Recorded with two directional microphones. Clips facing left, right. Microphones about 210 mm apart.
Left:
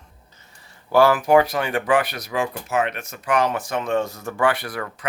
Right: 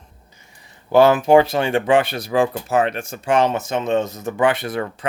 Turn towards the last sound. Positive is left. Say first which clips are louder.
# right 5 dB
turn(degrees=-25)  # may be behind; listen again after turning